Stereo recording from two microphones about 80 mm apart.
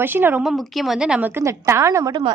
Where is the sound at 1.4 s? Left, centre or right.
Right.